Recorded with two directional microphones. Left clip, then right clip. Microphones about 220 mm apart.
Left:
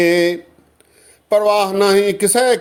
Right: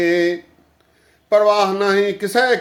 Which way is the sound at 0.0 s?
35° left (ahead or behind).